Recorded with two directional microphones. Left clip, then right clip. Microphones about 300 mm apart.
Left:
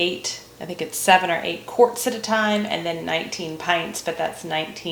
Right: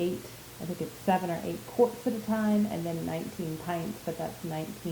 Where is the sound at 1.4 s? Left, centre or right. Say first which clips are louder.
Left 9 dB; left.